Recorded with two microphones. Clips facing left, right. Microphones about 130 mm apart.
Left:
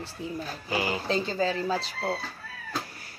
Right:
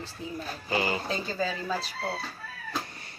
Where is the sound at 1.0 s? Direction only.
25° left (ahead or behind).